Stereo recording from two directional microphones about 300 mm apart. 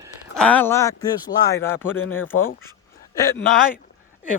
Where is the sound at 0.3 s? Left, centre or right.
Centre.